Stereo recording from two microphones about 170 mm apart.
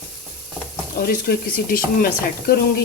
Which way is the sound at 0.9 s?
60° left (ahead or behind).